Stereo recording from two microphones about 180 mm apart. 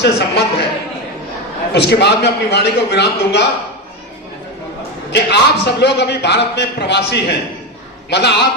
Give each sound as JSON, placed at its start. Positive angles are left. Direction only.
{"t": 0.0, "sound": "a man's voice", "side_deg": 65}
{"t": 1.7, "sound": "a man's voice", "side_deg": 70}
{"t": 5.1, "sound": "a man's voice", "side_deg": 70}